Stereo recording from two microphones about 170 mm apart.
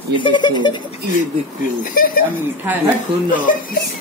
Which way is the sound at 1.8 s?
55° left (ahead or behind).